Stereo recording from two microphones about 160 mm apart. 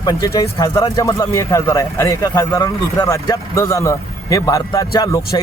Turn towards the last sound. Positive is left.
turn(degrees=20)  # may be behind; listen again after turning